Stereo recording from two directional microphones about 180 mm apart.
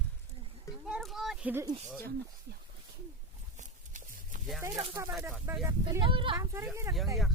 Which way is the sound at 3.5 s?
45° right (ahead or behind).